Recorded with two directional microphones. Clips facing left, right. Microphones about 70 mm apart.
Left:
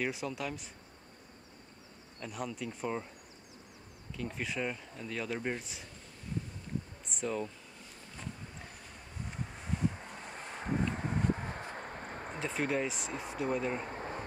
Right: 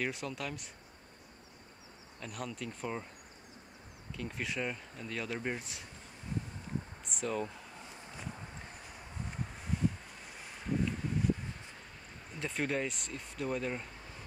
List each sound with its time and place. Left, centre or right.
0.0 s speech: centre
2.1 s speech: centre
4.2 s speech: centre
7.1 s speech: centre
9.2 s a sound: centre
9.8 s a sound: centre
10.3 s wind: left
11.0 s a sound: left
12.4 s speech: centre
13.1 s speech: left
13.4 s speech: centre
13.8 s a sound: left